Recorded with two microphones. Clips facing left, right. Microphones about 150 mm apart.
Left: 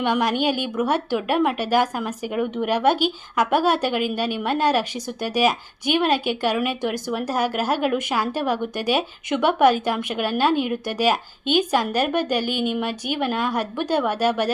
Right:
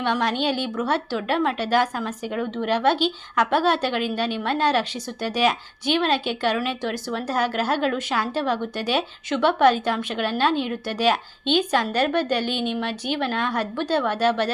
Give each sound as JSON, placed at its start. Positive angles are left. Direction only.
{"t": 0.0, "sound": "a woman's voice", "side_deg": 15}